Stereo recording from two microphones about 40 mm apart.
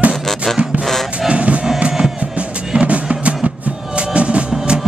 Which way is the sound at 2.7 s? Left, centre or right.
Right.